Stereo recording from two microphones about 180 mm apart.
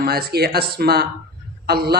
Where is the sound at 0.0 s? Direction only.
55° right (ahead or behind).